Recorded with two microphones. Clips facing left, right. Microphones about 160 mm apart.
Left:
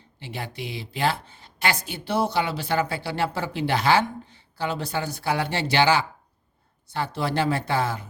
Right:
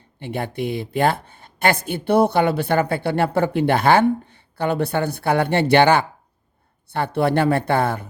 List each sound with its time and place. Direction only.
0.2 s a woman's voice: 55° right (ahead or behind)